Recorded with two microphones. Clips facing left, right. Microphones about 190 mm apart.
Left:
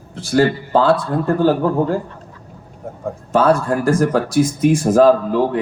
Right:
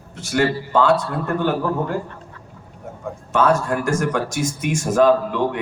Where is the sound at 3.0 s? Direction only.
35° left (ahead or behind).